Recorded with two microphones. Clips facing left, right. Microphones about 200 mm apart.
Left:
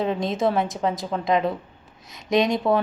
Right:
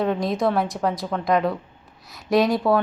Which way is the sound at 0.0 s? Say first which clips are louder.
Right 1 dB; centre (ahead or behind).